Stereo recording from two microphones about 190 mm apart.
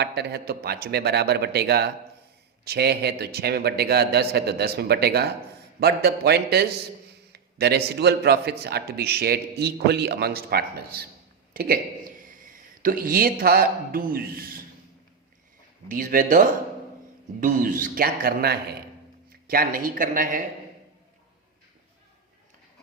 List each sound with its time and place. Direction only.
0.0 s a man's voice: 60° right (ahead or behind)
15.9 s a man's voice: 45° right (ahead or behind)